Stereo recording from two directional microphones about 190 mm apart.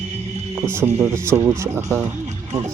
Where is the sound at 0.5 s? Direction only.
15° right (ahead or behind).